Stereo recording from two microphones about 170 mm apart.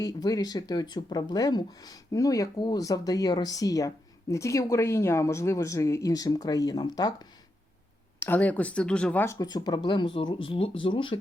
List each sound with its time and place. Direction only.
0.0 s speech: 20° left (ahead or behind)
8.2 s speech: 10° left (ahead or behind); by 11.2 s 30° left (ahead or behind)